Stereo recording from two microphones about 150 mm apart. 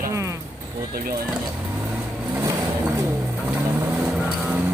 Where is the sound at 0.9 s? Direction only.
75° right (ahead or behind).